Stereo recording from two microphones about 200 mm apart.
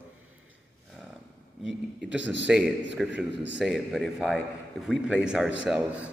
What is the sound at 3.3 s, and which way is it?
Speech, 60° right (ahead or behind).